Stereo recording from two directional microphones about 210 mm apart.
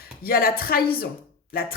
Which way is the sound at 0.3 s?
45° left (ahead or behind).